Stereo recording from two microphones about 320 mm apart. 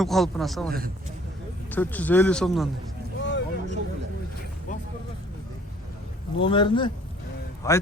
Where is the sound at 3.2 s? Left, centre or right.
Left.